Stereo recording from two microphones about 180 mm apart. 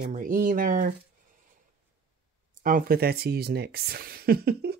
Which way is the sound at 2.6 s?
55° right (ahead or behind).